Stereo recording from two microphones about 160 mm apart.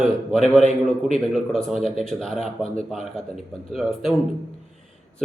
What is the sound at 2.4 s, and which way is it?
Speech, 40° left (ahead or behind).